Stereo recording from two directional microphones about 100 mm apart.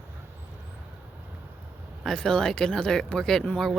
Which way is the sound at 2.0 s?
5° left (ahead or behind).